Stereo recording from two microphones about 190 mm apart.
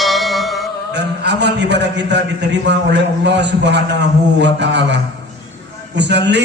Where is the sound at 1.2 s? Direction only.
65° right (ahead or behind).